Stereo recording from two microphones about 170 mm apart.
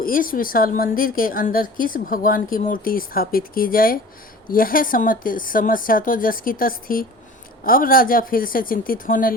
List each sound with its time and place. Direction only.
0.0 s a woman's voice: 55° left (ahead or behind)